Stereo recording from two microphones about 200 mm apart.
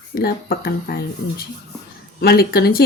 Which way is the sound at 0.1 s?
50° left (ahead or behind).